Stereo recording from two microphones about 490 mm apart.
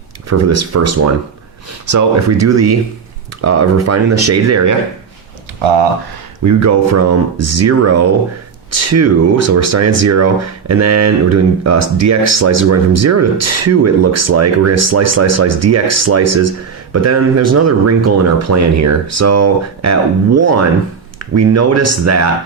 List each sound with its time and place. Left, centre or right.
0.3 s speech: right
6.4 s speech: right